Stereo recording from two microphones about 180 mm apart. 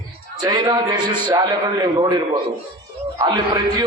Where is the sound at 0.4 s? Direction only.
20° right (ahead or behind).